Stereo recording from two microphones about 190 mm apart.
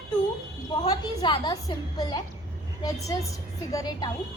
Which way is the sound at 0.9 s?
20° left (ahead or behind).